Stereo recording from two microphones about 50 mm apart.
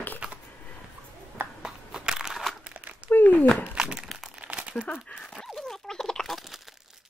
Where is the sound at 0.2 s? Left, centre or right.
Centre.